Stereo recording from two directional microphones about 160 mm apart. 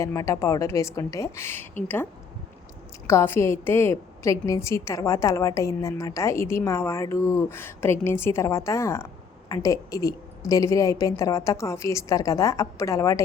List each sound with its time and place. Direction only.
0.0 s a woman's voice: 20° left (ahead or behind)
3.1 s a woman's voice: 15° left (ahead or behind)